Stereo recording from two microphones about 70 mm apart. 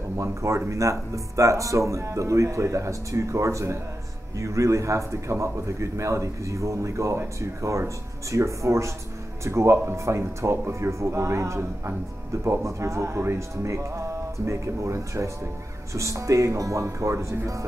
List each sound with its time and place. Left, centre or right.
0.2 s speech: right